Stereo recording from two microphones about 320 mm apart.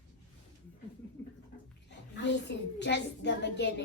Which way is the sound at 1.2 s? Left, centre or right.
Centre.